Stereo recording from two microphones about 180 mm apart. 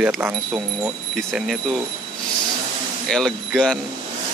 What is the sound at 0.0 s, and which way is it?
Wind chime, 10° right (ahead or behind).